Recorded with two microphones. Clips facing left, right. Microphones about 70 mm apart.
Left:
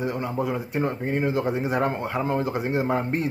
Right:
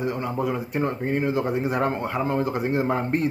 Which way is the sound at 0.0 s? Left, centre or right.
Left.